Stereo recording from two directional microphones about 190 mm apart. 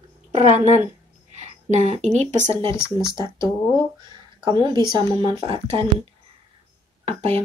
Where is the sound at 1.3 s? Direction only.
40° right (ahead or behind).